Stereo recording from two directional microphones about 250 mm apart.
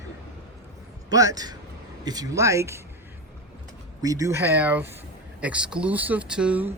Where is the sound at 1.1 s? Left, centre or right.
Centre.